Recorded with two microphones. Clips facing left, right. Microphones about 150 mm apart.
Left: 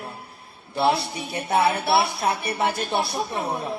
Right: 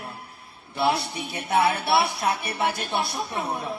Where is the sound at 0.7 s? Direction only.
25° left (ahead or behind).